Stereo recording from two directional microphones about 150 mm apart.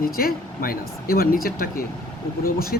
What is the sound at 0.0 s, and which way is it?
Speech, 80° left.